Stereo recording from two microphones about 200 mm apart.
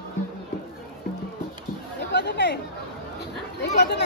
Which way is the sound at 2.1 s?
55° left (ahead or behind).